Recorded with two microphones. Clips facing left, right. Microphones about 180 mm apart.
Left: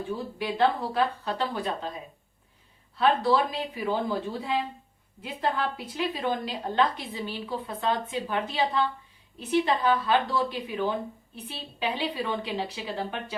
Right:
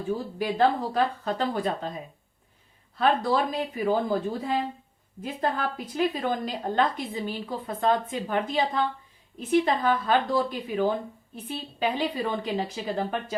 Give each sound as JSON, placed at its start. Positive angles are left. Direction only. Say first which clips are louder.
{"t": 0.1, "sound": "a woman's voice", "louder": "right 6 dB", "side_deg": -45}
{"t": 3.0, "sound": "a woman's voice", "louder": "even", "side_deg": -45}